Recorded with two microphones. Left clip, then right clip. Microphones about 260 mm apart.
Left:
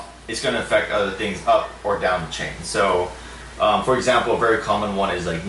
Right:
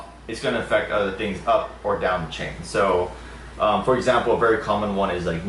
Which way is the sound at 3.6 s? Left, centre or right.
Right.